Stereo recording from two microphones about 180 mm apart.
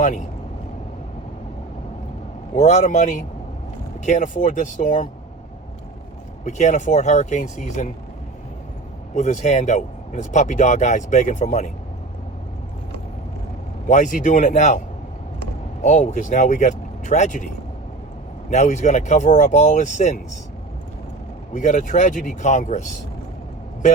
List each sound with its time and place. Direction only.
0.0 s speech: 40° left (ahead or behind)
2.6 s speech: 40° left (ahead or behind)
6.4 s speech: 40° left (ahead or behind)
9.1 s speech: 40° left (ahead or behind)
13.8 s speech: 45° left (ahead or behind)
15.8 s speech: 40° left (ahead or behind)
18.5 s speech: 40° left (ahead or behind)
21.5 s speech: 45° left (ahead or behind)